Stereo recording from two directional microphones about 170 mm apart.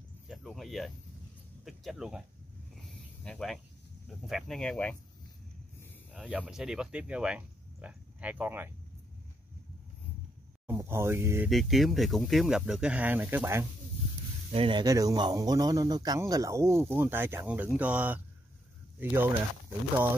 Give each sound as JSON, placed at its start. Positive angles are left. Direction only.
{"t": 0.3, "sound": "cricket", "side_deg": 0}
{"t": 1.6, "sound": "speech", "side_deg": 0}
{"t": 2.7, "sound": "snake", "side_deg": 5}
{"t": 4.3, "sound": "speech", "side_deg": 0}
{"t": 6.1, "sound": "speech", "side_deg": -5}
{"t": 10.7, "sound": "speech", "side_deg": -15}
{"t": 11.4, "sound": "speech", "side_deg": 0}
{"t": 14.5, "sound": "speech", "side_deg": -30}